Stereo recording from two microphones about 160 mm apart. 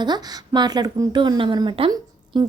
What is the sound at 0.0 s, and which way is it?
A woman's voice, 25° right (ahead or behind).